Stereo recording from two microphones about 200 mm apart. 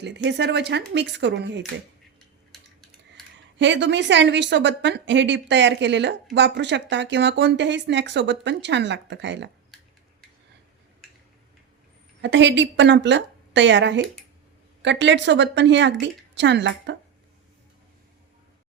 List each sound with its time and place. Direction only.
0.0 s a woman's voice: 60° right (ahead or behind)
2.5 s a sound: centre (ahead or behind)
3.6 s a woman's voice: 60° right (ahead or behind)
12.2 s a woman's voice: 65° right (ahead or behind)